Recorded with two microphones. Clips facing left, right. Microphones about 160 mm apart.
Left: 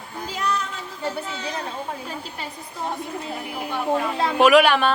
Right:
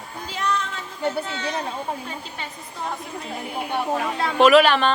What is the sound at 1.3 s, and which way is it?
Speech, 5° left (ahead or behind).